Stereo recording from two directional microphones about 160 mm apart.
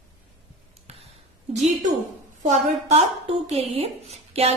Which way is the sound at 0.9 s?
45° right (ahead or behind).